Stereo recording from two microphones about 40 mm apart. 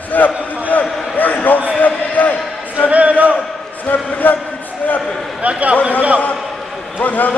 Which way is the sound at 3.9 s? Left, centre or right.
Left.